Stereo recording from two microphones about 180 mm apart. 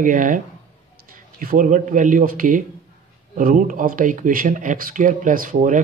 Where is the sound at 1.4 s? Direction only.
50° right (ahead or behind).